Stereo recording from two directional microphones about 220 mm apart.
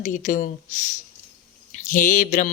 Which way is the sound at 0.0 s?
35° left (ahead or behind).